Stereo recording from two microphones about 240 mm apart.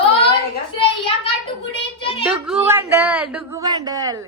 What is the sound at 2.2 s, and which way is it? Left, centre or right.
Speech, centre.